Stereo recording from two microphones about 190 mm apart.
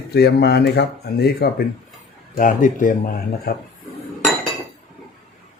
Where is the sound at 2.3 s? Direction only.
45° left (ahead or behind).